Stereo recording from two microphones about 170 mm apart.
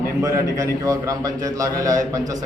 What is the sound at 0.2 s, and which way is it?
A man's voice, 20° right (ahead or behind).